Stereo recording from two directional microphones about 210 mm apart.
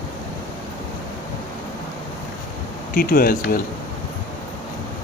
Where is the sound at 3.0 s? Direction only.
45° left (ahead or behind).